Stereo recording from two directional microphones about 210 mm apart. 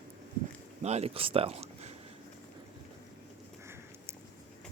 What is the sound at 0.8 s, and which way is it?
Speech, 30° right (ahead or behind).